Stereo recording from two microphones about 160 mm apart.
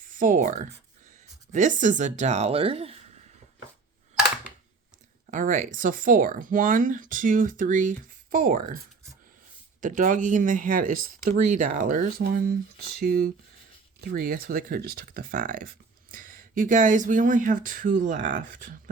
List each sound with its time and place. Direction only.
0.0 s speech: 55° right (ahead or behind); by 3.0 s 40° right (ahead or behind)
5.2 s speech: 50° right (ahead or behind)
9.8 s speech: 55° right (ahead or behind)
12.9 s speech: 70° right (ahead or behind); by 18.7 s 55° right (ahead or behind)